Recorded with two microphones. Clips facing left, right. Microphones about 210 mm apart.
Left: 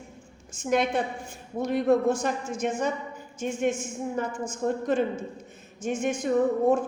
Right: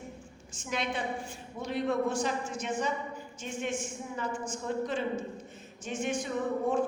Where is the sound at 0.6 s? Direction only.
50° left (ahead or behind).